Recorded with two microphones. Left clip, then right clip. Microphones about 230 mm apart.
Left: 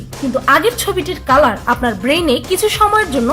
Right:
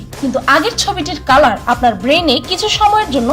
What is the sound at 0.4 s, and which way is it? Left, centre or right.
A woman's voice, centre.